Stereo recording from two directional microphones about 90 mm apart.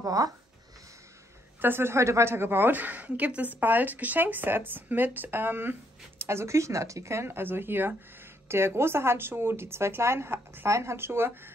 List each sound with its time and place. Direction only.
0.0 s speech: 40° right (ahead or behind)
1.6 s a woman's voice: 25° right (ahead or behind)